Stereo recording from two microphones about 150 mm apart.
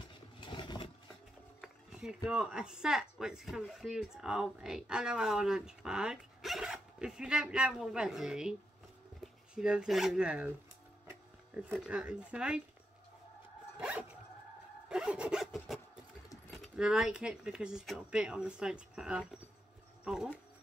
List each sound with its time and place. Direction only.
0.4 s vehicle: 30° left (ahead or behind)
1.6 s speech: 5° right (ahead or behind)
13.7 s zipper: 5° right (ahead or behind)
14.9 s rub: 5° right (ahead or behind)
16.4 s speech: centre (ahead or behind)